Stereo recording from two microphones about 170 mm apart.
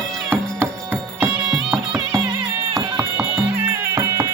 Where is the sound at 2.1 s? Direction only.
20° right (ahead or behind).